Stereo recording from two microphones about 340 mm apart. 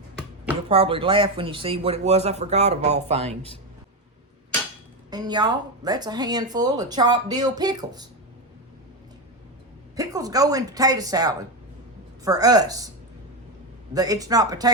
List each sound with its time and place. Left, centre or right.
0.7 s speech: centre
5.1 s speech: centre
9.9 s speech: centre
13.9 s speech: centre